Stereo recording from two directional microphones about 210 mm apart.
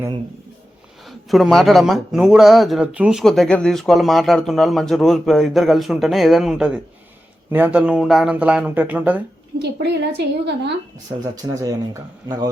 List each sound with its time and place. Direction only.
1.0 s speech: centre (ahead or behind)
9.6 s a woman's voice: 50° right (ahead or behind)
11.4 s speech: 15° right (ahead or behind)